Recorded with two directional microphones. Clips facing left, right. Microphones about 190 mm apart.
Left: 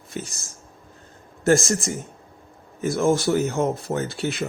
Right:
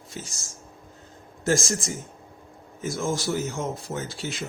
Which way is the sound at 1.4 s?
60° left (ahead or behind).